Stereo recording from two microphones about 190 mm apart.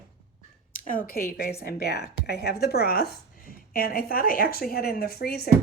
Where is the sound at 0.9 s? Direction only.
50° left (ahead or behind).